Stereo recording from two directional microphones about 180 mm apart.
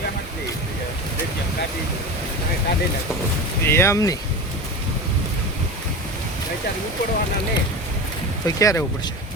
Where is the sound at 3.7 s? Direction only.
15° left (ahead or behind).